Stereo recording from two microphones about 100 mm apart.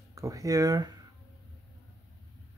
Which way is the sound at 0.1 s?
35° right (ahead or behind).